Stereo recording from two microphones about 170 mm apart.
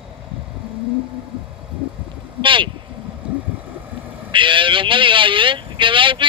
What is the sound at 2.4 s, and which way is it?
Vehicle, 30° right (ahead or behind).